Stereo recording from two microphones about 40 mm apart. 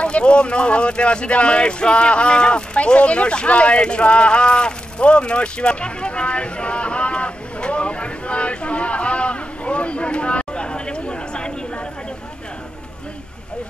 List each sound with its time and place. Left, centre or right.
0.0 s speech: left